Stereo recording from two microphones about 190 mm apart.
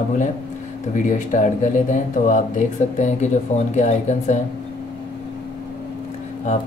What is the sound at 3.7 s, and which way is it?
Speech, 40° left (ahead or behind).